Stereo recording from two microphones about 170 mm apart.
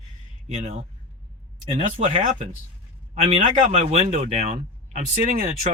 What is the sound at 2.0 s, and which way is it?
Speech, 40° right (ahead or behind).